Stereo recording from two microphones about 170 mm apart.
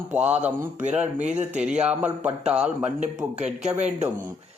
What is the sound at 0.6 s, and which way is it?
Speech, 50° right (ahead or behind).